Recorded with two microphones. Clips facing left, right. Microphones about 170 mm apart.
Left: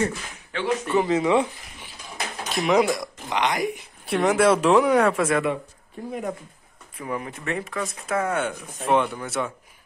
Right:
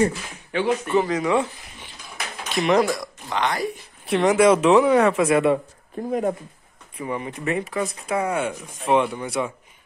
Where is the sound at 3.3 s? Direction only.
20° left (ahead or behind).